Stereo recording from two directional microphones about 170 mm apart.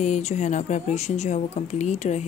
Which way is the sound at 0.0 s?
45° left (ahead or behind).